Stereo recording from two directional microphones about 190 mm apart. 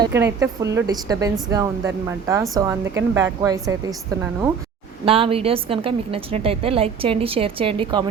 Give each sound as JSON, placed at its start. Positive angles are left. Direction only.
{"t": 0.0, "sound": "a woman's voice", "side_deg": -15}
{"t": 5.0, "sound": "a woman's voice", "side_deg": -30}